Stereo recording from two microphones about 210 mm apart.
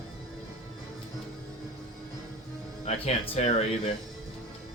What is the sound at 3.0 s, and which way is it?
Speech, 30° left (ahead or behind).